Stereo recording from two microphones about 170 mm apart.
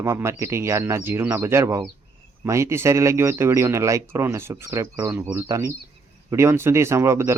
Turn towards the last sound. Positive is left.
turn(degrees=-15)  # may be behind; listen again after turning